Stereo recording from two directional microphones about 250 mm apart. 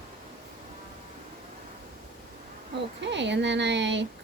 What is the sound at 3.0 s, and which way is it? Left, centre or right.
Speech, right.